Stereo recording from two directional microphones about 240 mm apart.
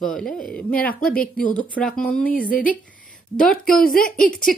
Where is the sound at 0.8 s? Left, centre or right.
Left.